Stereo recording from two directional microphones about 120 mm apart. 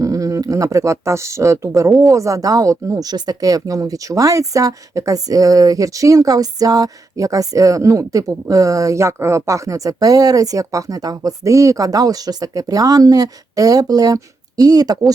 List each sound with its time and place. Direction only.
0.0 s speech: 30° right (ahead or behind)